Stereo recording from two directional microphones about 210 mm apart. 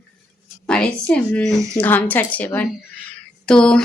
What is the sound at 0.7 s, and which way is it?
A woman's voice, 5° left (ahead or behind).